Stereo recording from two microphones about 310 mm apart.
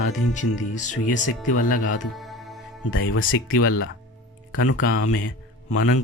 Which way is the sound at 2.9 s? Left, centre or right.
Left.